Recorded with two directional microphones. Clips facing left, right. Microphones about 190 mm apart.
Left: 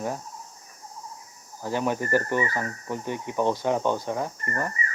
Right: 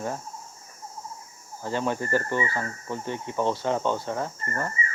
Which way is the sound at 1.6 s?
15° left (ahead or behind).